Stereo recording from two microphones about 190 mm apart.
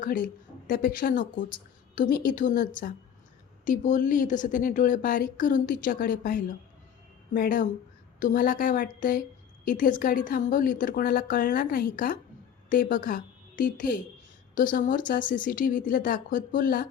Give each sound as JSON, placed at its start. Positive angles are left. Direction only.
{"t": 0.0, "sound": "a woman's voice", "side_deg": 45}